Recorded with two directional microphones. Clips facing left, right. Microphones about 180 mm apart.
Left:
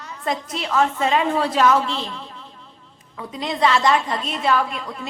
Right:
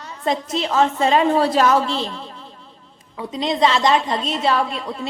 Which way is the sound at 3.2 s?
20° right (ahead or behind).